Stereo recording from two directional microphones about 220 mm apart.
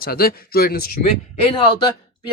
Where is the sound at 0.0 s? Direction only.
45° left (ahead or behind).